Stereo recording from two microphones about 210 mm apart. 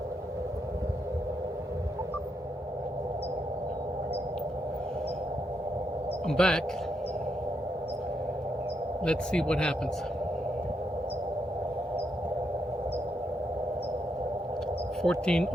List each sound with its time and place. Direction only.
6.2 s speech: 5° left (ahead or behind)
9.0 s speech: 5° left (ahead or behind)
15.0 s speech: 5° left (ahead or behind)